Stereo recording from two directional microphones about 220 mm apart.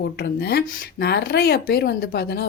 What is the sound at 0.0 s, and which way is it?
Speech, 45° left (ahead or behind).